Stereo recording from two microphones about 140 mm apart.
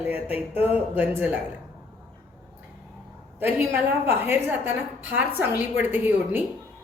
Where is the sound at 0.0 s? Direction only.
10° right (ahead or behind).